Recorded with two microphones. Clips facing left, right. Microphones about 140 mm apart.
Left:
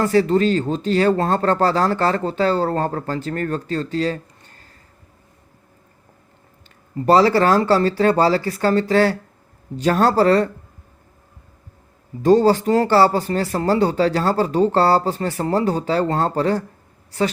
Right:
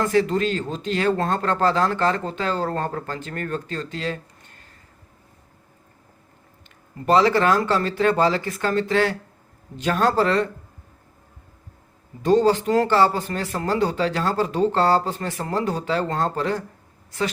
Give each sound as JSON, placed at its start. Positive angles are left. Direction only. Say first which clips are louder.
{"t": 0.0, "sound": "speech", "louder": "left 4 dB", "side_deg": 35}
{"t": 7.0, "sound": "speech", "louder": "left 3 dB", "side_deg": 35}
{"t": 12.2, "sound": "speech", "louder": "left 4 dB", "side_deg": 40}